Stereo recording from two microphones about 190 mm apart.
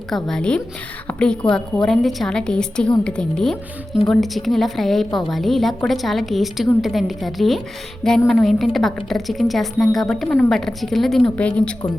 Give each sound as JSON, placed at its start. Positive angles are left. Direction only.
{"t": 0.1, "sound": "a woman's voice", "side_deg": 5}